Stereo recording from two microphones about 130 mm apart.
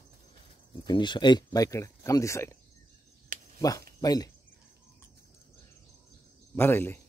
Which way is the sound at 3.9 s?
30° left (ahead or behind).